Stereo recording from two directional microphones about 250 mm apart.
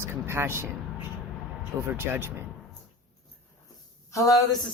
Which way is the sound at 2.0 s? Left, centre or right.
Centre.